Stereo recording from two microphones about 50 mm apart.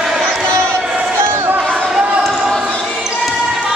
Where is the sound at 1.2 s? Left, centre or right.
Right.